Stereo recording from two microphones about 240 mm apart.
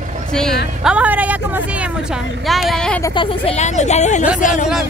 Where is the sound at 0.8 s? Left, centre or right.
Centre.